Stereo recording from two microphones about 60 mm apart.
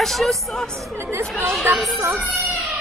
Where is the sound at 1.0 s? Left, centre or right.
Right.